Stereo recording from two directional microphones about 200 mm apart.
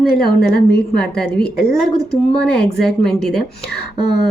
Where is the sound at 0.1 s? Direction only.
50° left (ahead or behind).